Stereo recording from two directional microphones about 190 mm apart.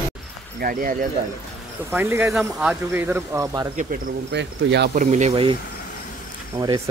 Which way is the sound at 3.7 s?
45° right (ahead or behind).